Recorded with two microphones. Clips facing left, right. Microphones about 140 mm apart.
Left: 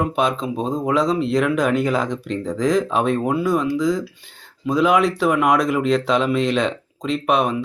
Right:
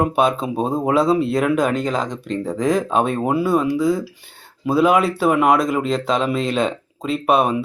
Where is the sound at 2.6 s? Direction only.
55° right (ahead or behind).